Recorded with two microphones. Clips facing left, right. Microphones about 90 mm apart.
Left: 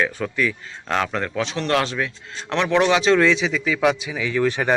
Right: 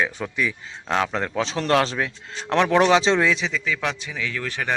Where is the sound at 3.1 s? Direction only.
5° right (ahead or behind); by 4.7 s 20° left (ahead or behind).